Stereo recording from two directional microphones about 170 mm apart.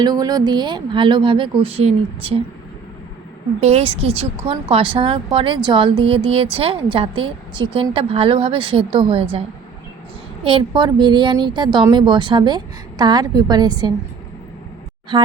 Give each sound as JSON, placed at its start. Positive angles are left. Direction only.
{"t": 0.0, "sound": "speech", "side_deg": -25}
{"t": 3.6, "sound": "speech", "side_deg": -35}
{"t": 10.4, "sound": "speech", "side_deg": -30}
{"t": 15.1, "sound": "speech", "side_deg": -25}